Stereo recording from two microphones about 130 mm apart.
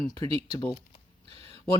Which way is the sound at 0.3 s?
50° right (ahead or behind).